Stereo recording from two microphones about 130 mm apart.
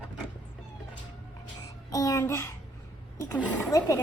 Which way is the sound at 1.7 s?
25° left (ahead or behind).